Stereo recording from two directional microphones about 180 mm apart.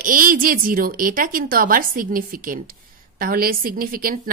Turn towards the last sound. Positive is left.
turn(degrees=-55)  # may be behind; listen again after turning